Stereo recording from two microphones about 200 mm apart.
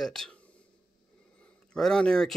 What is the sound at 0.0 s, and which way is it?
Speech, centre (ahead or behind).